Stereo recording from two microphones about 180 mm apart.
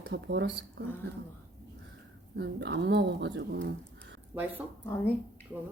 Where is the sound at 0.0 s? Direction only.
70° right (ahead or behind).